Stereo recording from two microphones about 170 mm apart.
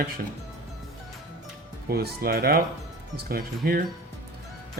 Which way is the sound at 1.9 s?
65° right (ahead or behind).